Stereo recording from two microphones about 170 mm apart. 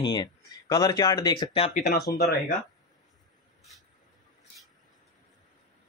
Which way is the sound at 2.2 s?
75° left (ahead or behind).